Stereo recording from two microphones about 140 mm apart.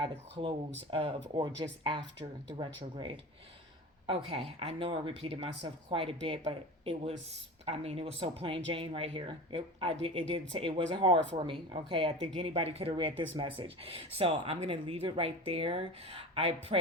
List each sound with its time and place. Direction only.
0.0 s speech: 40° right (ahead or behind)